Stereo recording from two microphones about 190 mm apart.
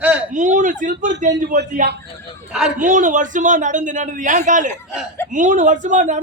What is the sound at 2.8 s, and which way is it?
Speech, 40° right (ahead or behind).